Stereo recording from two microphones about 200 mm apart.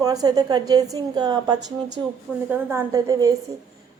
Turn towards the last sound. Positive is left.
turn(degrees=-20)  # may be behind; listen again after turning